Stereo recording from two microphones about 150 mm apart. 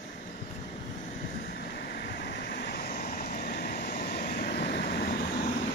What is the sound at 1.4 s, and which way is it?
Vehicle, 90° left.